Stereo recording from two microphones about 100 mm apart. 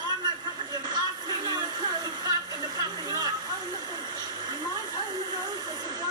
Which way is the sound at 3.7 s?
45° right (ahead or behind).